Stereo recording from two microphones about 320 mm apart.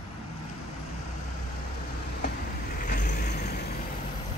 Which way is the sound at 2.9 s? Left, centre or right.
Left.